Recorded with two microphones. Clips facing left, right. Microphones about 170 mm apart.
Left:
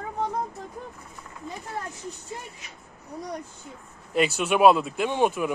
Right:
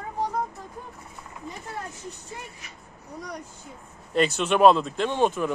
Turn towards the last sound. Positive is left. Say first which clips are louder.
# even
turn(degrees=10)  # may be behind; listen again after turning